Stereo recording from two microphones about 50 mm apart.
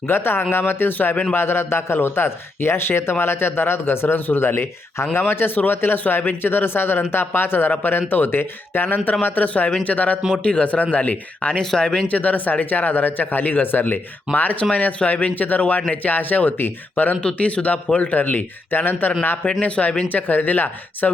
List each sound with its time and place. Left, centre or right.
0.1 s a man's voice: left
11.8 s speech: centre
12.0 s speech: left
19.6 s speech: left